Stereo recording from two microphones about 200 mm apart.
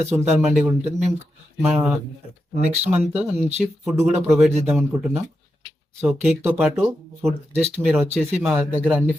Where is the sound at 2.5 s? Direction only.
35° right (ahead or behind).